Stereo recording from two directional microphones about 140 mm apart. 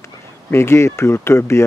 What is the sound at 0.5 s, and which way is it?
Speech, 20° left (ahead or behind).